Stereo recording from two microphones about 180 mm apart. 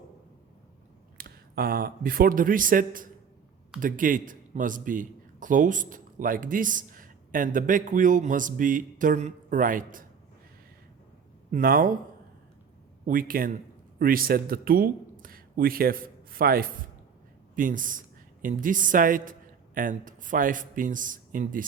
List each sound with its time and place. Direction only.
1.2 s a man's voice: 55° right (ahead or behind)
11.5 s a man's voice: 50° right (ahead or behind)
13.1 s a man's voice: 50° right (ahead or behind)